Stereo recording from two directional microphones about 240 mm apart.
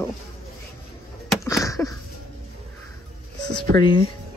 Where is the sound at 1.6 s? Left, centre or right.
Centre.